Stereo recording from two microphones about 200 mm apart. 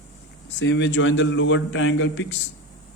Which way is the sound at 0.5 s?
65° left (ahead or behind).